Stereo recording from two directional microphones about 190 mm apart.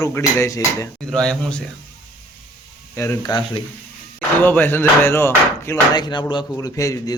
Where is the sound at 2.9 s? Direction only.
15° left (ahead or behind).